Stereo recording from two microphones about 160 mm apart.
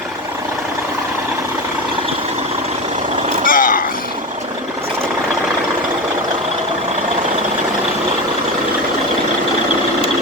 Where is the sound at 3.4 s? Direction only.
55° left (ahead or behind).